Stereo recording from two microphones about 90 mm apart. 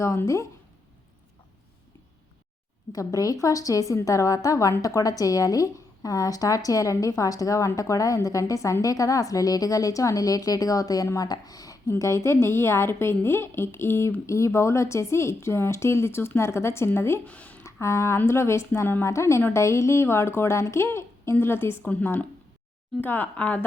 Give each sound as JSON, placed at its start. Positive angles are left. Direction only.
{"t": 0.0, "sound": "a woman's voice", "side_deg": 35}
{"t": 2.9, "sound": "a woman's voice", "side_deg": 40}
{"t": 17.2, "sound": "speech", "side_deg": 15}
{"t": 17.6, "sound": "a woman's voice", "side_deg": 30}
{"t": 23.0, "sound": "a woman's voice", "side_deg": 20}